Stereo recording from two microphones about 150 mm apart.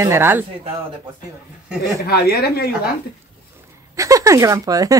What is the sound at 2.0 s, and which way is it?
Speech, 90° left.